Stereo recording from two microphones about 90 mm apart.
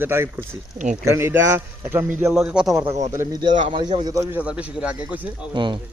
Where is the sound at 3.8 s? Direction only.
45° right (ahead or behind).